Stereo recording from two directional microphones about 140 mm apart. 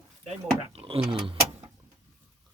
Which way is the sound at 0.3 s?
45° right (ahead or behind).